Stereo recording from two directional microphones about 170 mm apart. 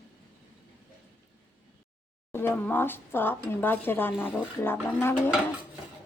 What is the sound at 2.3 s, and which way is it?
A woman's voice, 15° left (ahead or behind).